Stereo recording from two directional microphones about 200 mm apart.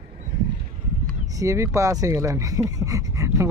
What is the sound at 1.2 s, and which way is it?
Speech, 15° right (ahead or behind).